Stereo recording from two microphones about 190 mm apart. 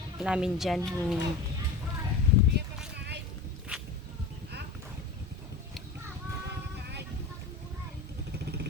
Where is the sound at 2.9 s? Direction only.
60° right (ahead or behind).